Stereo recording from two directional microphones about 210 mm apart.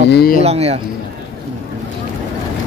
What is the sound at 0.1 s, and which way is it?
Speech, 50° left (ahead or behind).